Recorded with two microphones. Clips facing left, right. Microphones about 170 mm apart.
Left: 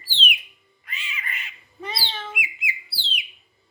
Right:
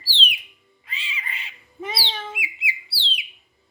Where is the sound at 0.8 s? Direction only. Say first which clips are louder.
Even; 30° right (ahead or behind).